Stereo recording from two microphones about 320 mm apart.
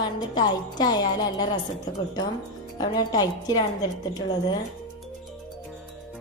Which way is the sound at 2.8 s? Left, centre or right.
Centre.